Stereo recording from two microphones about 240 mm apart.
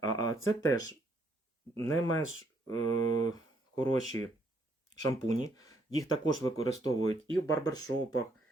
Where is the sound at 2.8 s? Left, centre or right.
Right.